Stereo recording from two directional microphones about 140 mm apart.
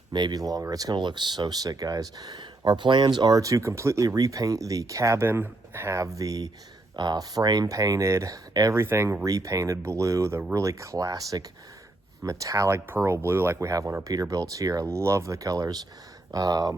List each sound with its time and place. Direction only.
0.1 s speech: 30° right (ahead or behind)